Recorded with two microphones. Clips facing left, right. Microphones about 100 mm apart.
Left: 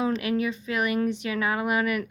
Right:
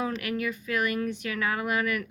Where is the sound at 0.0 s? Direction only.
25° left (ahead or behind).